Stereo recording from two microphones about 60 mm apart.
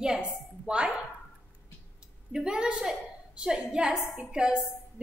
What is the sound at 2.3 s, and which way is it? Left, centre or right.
A woman's voice, centre.